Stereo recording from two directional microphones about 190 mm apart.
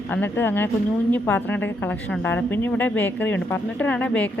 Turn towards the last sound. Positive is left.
turn(degrees=5)  # may be behind; listen again after turning